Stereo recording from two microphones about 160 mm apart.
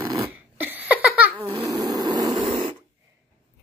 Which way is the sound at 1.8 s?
25° right (ahead or behind).